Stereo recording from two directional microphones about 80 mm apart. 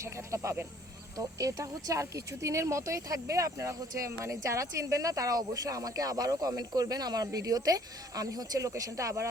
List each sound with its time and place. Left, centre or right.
0.0 s snake: right
1.1 s speech: right